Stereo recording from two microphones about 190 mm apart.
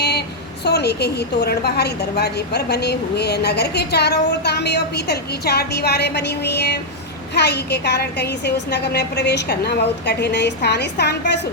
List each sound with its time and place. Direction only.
0.6 s a woman's voice: 60° left (ahead or behind)